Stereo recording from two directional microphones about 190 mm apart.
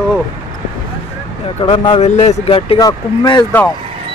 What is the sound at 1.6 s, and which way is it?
Speech, 25° left (ahead or behind).